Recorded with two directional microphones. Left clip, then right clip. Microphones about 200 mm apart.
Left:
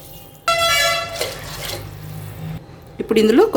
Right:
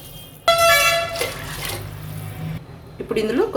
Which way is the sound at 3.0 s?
40° left (ahead or behind).